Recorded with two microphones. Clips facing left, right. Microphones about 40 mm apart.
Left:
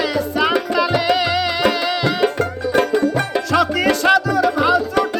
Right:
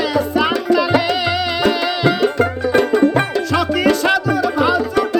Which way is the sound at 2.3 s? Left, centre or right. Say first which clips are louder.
Right 3 dB; right.